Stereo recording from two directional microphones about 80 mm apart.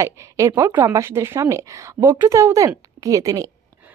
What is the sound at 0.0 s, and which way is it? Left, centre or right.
A woman's voice, right.